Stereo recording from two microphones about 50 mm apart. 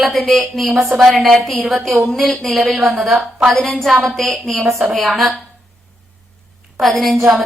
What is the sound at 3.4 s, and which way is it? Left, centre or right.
Speech, centre.